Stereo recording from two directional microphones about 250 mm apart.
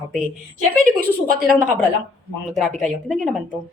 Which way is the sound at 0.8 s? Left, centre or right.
Right.